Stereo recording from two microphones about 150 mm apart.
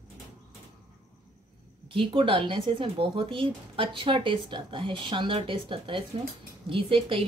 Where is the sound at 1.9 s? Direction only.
35° right (ahead or behind).